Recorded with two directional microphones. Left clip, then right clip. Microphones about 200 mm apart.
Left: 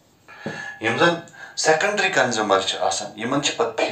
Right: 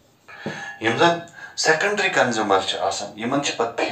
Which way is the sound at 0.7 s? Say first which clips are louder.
Right 1 dB; 10° left (ahead or behind).